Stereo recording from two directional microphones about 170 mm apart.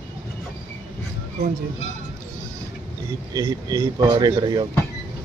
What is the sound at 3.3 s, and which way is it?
Speech, 20° right (ahead or behind).